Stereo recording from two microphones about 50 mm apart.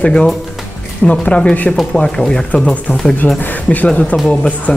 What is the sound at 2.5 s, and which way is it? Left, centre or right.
Speech, left.